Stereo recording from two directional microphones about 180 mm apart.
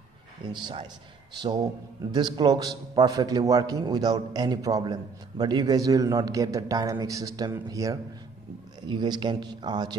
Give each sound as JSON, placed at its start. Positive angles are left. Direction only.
{"t": 0.5, "sound": "a man's voice", "side_deg": -25}